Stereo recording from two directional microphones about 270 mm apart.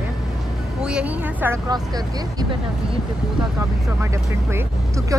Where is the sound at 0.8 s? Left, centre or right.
Centre.